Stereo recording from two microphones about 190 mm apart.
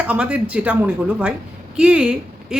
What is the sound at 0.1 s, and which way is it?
Speech, 5° right (ahead or behind).